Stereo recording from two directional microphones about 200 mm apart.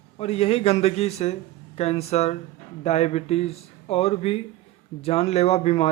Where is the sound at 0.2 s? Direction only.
30° left (ahead or behind).